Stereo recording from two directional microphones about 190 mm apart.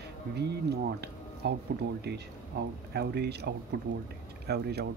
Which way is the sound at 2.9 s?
60° right (ahead or behind).